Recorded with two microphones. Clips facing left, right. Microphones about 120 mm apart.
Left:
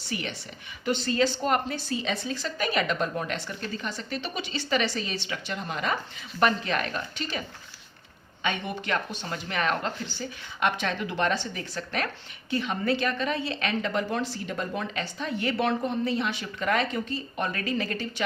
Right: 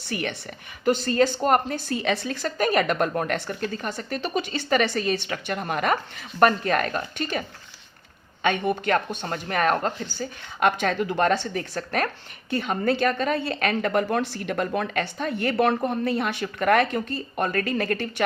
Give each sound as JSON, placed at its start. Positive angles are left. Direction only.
{"t": 0.1, "sound": "a woman's voice", "side_deg": -55}
{"t": 8.4, "sound": "speech", "side_deg": -50}